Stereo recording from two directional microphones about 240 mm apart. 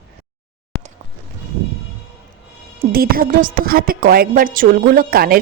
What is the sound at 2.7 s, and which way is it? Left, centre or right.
A woman's voice, right.